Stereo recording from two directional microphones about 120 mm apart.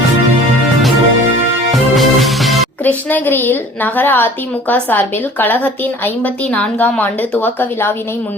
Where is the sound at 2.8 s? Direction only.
15° left (ahead or behind).